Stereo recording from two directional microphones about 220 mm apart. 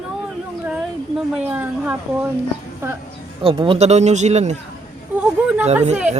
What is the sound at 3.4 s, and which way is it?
Speech, 25° right (ahead or behind).